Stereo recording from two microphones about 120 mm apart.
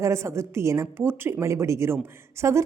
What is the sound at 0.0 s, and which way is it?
A woman's voice, 25° right (ahead or behind).